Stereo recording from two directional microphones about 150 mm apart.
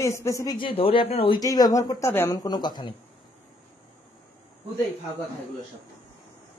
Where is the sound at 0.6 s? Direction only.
35° left (ahead or behind).